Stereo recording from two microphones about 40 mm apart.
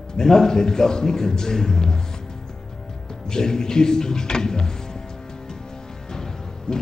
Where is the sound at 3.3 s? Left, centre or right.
Centre.